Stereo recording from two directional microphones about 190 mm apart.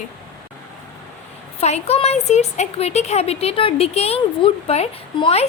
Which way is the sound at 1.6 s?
35° left (ahead or behind).